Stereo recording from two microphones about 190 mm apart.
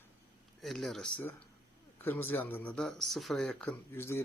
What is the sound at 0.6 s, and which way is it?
Speech, centre (ahead or behind).